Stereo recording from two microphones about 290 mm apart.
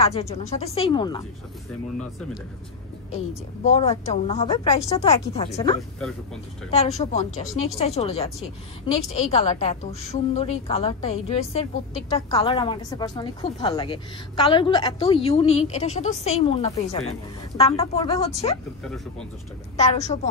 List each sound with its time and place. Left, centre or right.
0.0 s a woman's voice: left
3.7 s a woman's voice: left
5.8 s speech: centre
6.7 s a woman's voice: left
19.8 s a woman's voice: left